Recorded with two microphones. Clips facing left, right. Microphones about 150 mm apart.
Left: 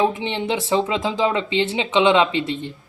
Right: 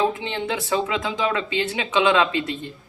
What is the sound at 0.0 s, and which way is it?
A woman's voice, 20° left (ahead or behind).